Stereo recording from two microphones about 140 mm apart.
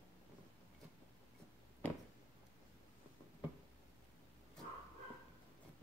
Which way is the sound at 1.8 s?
10° left (ahead or behind).